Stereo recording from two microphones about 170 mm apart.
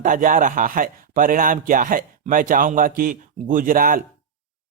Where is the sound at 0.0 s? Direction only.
50° right (ahead or behind).